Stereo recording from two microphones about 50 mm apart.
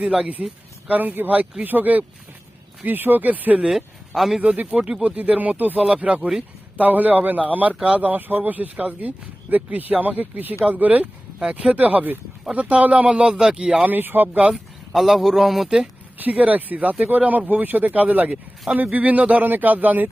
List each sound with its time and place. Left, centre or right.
0.0 s speech: centre
0.9 s speech: right
3.7 s speech: centre
4.4 s speech: right
5.0 s speech: right
5.9 s speech: right
6.7 s speech: right
11.3 s speech: centre
13.8 s speech: right
14.5 s speech: centre
16.1 s speech: right